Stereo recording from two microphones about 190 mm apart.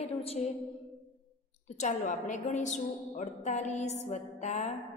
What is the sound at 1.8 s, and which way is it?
A woman's voice, 40° left (ahead or behind).